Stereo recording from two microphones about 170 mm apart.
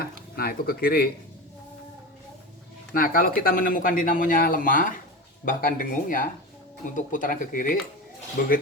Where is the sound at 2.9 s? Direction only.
55° left (ahead or behind).